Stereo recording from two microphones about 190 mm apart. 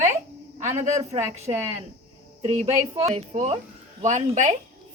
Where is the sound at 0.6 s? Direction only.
40° right (ahead or behind).